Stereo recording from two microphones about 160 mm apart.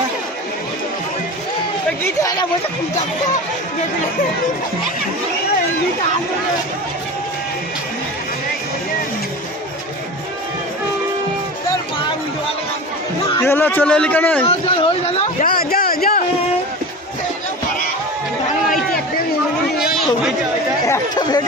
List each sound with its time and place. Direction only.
2.0 s speech: 20° left (ahead or behind)
13.4 s a man's voice: 15° left (ahead or behind)
14.4 s speech: 40° left (ahead or behind)
15.4 s a sound: 65° left (ahead or behind)
20.8 s chatter: 20° left (ahead or behind)